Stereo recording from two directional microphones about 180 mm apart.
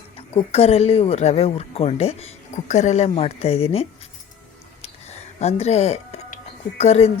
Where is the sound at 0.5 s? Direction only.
35° left (ahead or behind).